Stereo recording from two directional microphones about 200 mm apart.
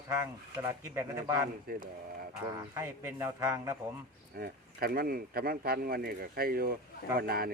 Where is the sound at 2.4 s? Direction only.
15° right (ahead or behind).